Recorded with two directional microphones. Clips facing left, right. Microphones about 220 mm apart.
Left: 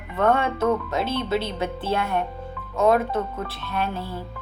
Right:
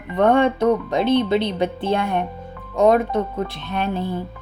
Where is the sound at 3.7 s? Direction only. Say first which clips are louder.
Right 3 dB; 20° right (ahead or behind).